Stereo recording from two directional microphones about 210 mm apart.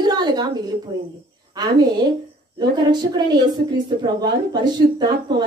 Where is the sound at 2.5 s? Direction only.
20° right (ahead or behind).